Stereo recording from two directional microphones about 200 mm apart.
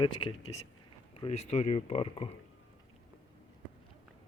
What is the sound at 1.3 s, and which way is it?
Speech, 30° left (ahead or behind).